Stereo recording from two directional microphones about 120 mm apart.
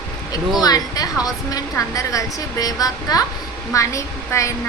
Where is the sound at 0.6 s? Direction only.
30° left (ahead or behind).